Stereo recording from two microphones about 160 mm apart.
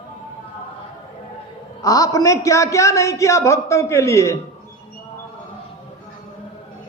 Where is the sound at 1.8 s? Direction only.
20° left (ahead or behind).